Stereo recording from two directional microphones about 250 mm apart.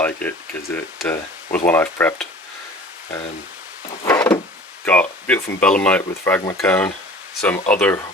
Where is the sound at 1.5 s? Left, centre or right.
Centre.